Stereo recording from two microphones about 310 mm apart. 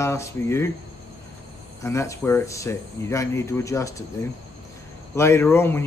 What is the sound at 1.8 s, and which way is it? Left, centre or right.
A man's voice, centre.